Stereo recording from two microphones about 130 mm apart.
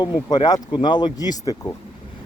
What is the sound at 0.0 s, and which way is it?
Speech, 30° left (ahead or behind).